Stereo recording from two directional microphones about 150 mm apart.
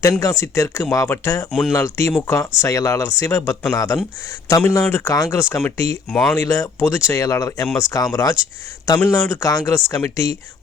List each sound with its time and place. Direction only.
0.0 s speech: 20° left (ahead or behind)
1.5 s speech: centre (ahead or behind)
1.7 s speech: 20° left (ahead or behind)
6.1 s speech: centre (ahead or behind)
6.3 s speech: 20° left (ahead or behind)